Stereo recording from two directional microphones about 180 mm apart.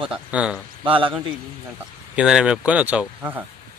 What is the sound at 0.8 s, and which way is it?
Speech, 30° right (ahead or behind).